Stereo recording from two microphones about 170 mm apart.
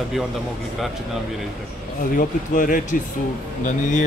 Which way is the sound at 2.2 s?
50° left (ahead or behind).